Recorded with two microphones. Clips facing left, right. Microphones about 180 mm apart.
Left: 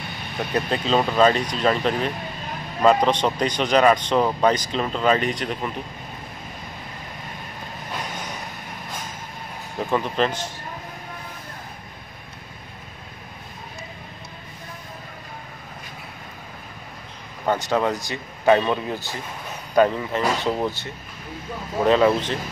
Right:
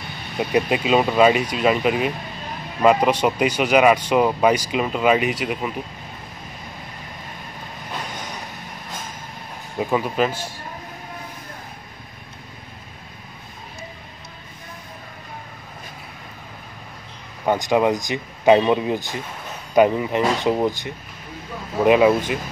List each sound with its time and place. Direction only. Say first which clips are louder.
0.4 s speech: right 4 dB; 15° right (ahead or behind)
9.8 s speech: right 2 dB; 10° right (ahead or behind)
17.5 s speech: right 3 dB; 15° right (ahead or behind)